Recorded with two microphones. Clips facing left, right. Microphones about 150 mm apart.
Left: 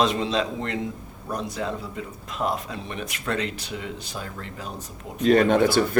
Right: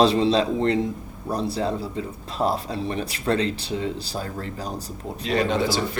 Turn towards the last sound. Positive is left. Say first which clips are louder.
# left 4 dB
turn(degrees=55)  # may be behind; listen again after turning